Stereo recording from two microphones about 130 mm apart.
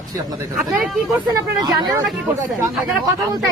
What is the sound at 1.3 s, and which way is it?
Speech, 30° right (ahead or behind).